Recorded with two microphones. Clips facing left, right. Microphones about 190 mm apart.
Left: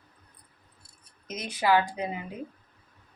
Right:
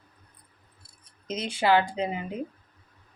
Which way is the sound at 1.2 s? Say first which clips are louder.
Right 2 dB; 30° right (ahead or behind).